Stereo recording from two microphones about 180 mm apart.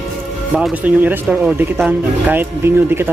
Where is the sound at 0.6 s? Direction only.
5° right (ahead or behind).